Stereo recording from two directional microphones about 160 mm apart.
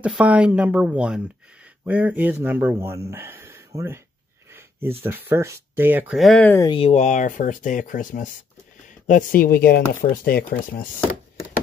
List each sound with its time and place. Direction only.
0.0 s speech: 10° right (ahead or behind)
4.5 s a sound: 15° right (ahead or behind)
5.0 s speech: 15° right (ahead or behind)
6.1 s speech: 5° left (ahead or behind)
6.6 s speech: 30° left (ahead or behind)
6.9 s speech: 45° left (ahead or behind); by 10.9 s 65° left (ahead or behind)